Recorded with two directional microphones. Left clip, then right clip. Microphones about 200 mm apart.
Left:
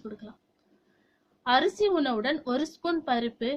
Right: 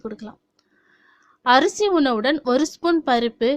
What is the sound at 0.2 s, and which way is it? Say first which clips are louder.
Speech: right 9 dB; 50° right (ahead or behind).